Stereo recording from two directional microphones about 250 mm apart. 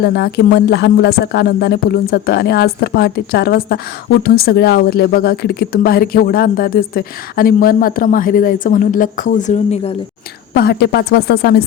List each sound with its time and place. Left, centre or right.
0.0 s speech: left
10.5 s speech: left